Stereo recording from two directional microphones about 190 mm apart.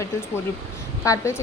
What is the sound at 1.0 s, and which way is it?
Speech, 15° left (ahead or behind).